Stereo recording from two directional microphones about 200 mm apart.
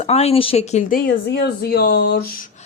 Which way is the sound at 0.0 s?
30° left (ahead or behind).